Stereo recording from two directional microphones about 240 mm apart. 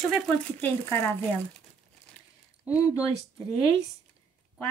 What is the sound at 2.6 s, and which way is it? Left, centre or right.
Speech, centre.